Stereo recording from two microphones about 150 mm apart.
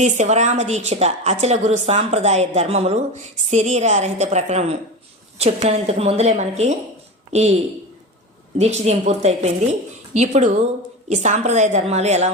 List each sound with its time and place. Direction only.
0.0 s a woman's voice: 50° right (ahead or behind)
8.5 s a woman's voice: 45° right (ahead or behind)